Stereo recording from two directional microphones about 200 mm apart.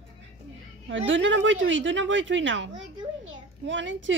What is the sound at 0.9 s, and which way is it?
Speech, 70° right (ahead or behind).